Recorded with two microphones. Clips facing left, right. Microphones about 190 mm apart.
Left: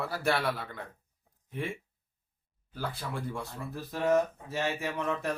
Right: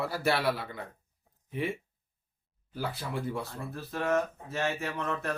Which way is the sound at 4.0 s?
15° left (ahead or behind).